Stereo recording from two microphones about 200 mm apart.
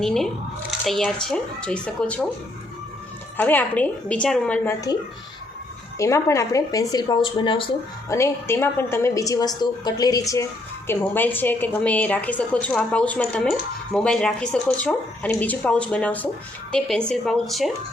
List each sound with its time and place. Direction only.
0.0 s speech: centre (ahead or behind)
3.3 s a woman's voice: 10° left (ahead or behind)
6.0 s a woman's voice: 15° left (ahead or behind)
8.1 s a woman's voice: 15° left (ahead or behind)